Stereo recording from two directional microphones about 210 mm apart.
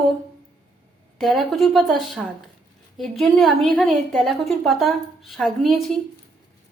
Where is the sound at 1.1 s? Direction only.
Centre (ahead or behind).